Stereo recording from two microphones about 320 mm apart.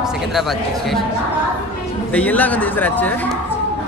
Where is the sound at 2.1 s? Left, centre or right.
Centre.